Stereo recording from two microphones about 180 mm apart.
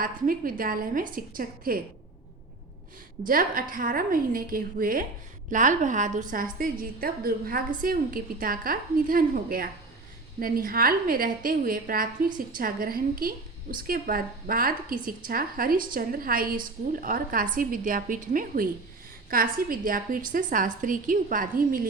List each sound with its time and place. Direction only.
0.0 s a woman's voice: 50° right (ahead or behind)
3.2 s a woman's voice: 50° right (ahead or behind)